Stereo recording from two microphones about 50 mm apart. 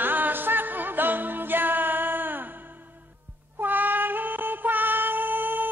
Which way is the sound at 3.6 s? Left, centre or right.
Right.